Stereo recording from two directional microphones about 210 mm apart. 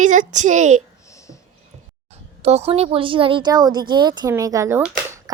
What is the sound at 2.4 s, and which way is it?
Speech, 30° right (ahead or behind).